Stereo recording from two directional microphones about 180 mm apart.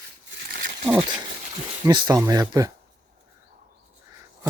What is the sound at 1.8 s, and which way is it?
Speech, 25° right (ahead or behind).